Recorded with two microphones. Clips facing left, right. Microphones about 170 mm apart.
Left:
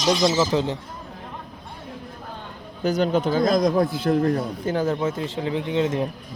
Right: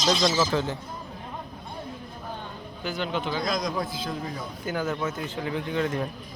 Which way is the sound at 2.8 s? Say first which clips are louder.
Left 9 dB; 40° left (ahead or behind).